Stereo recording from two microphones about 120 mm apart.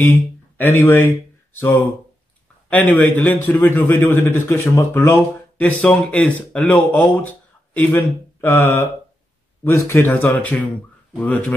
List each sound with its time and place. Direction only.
0.0 s speech: 15° left (ahead or behind)